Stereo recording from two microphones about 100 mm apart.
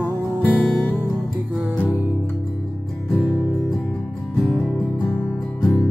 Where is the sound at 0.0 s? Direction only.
20° left (ahead or behind).